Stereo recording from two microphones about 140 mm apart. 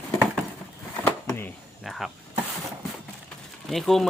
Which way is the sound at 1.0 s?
15° left (ahead or behind).